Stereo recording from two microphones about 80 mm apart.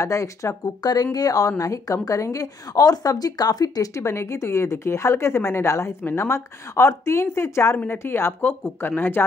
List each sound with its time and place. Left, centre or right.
0.0 s a woman's voice: left
7.7 s a woman's voice: left